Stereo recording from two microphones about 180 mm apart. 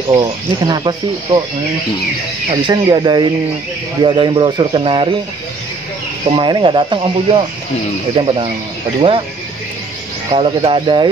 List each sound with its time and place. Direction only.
0.1 s speech: 20° right (ahead or behind)
2.5 s speech: 25° right (ahead or behind)
6.2 s speech: 30° right (ahead or behind)
10.3 s speech: 30° right (ahead or behind)